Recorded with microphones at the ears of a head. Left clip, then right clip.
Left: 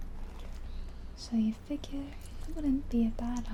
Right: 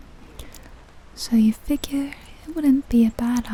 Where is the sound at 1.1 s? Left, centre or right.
Right.